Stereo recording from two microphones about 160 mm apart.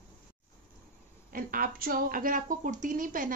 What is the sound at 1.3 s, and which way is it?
Speech, 65° right (ahead or behind).